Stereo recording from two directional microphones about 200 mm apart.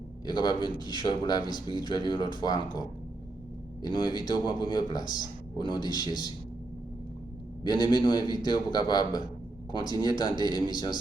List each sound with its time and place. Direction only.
0.3 s speech: 20° left (ahead or behind)
3.8 s speech: 20° left (ahead or behind)
7.6 s speech: 20° left (ahead or behind)